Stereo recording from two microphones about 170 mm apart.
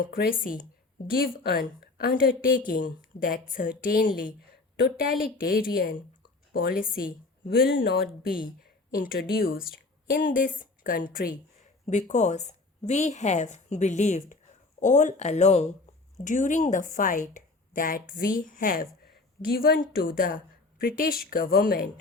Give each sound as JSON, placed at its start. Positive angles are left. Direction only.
{"t": 0.0, "sound": "a woman's voice", "side_deg": 60}
{"t": 5.4, "sound": "a woman's voice", "side_deg": 60}
{"t": 11.9, "sound": "a woman's voice", "side_deg": 45}